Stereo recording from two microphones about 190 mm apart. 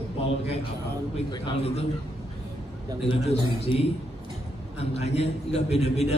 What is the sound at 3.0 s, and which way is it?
A man's voice, 30° left (ahead or behind).